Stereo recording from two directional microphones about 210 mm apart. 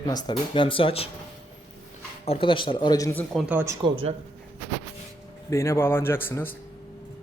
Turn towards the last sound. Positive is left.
turn(degrees=10)  # may be behind; listen again after turning